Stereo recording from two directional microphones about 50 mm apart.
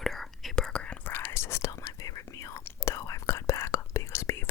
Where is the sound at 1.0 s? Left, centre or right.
Left.